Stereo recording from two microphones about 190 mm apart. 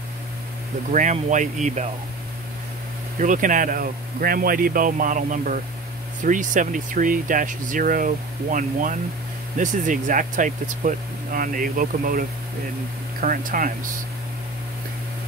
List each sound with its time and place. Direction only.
0.9 s speech: 40° right (ahead or behind)
3.2 s speech: 45° right (ahead or behind)